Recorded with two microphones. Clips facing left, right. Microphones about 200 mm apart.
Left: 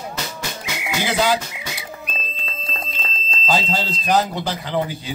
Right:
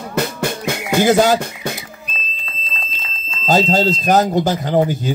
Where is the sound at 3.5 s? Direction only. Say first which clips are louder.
Right 8 dB; 45° right (ahead or behind).